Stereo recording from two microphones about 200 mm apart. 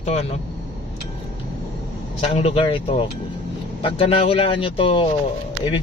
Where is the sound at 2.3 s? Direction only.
30° left (ahead or behind).